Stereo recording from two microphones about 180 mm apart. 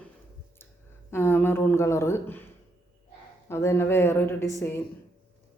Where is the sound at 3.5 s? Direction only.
15° left (ahead or behind).